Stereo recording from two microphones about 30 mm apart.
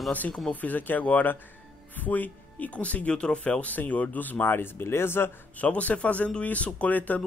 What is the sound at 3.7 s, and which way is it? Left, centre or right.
Speech, left.